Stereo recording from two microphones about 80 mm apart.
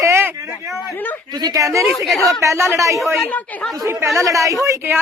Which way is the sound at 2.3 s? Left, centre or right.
Right.